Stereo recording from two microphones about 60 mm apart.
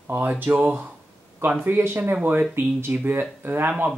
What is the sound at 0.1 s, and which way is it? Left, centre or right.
Speech, right.